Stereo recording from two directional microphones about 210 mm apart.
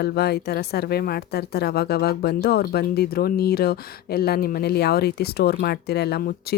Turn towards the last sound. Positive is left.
turn(degrees=50)  # may be behind; listen again after turning